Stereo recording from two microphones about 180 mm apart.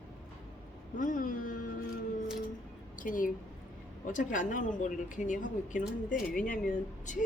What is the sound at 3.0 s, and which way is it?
Speech, 50° left (ahead or behind).